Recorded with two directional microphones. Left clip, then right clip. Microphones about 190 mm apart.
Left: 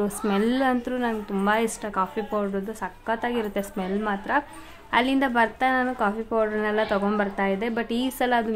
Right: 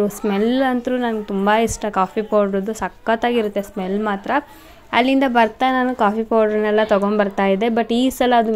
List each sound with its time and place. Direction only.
0.0 s a woman's voice: 20° right (ahead or behind)
3.5 s a woman's voice: 20° right (ahead or behind)